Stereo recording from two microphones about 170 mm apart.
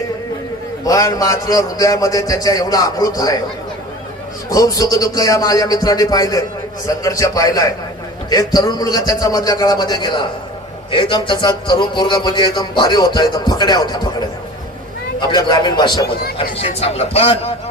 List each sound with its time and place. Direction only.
0.9 s a man's voice: 20° left (ahead or behind)
4.4 s a man's voice: 20° left (ahead or behind)
15.2 s a man's voice: 25° left (ahead or behind)
16.6 s a man's voice: 35° left (ahead or behind)